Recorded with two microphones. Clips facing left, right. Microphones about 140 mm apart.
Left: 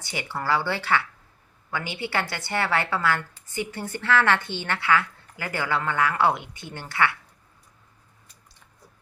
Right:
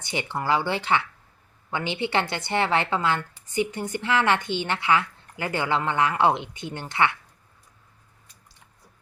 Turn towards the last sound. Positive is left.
turn(degrees=-20)  # may be behind; listen again after turning